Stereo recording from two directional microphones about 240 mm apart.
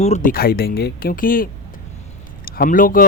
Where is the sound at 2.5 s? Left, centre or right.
Left.